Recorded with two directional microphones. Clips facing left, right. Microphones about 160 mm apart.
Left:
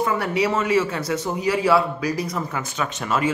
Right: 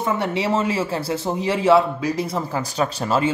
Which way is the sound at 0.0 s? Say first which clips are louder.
Left 1 dB; 25° right (ahead or behind).